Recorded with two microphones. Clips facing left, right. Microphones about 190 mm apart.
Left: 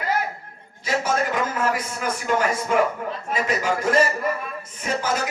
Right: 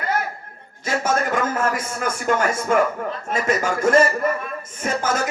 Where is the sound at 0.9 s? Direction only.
50° right (ahead or behind).